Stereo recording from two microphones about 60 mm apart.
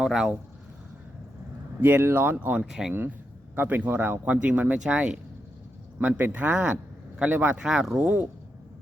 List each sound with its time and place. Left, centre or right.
0.0 s speech: centre
1.8 s speech: right
2.6 s speech: centre
3.5 s a man's voice: right
7.6 s speech: centre